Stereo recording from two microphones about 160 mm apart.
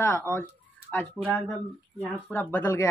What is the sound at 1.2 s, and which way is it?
Speech, centre (ahead or behind).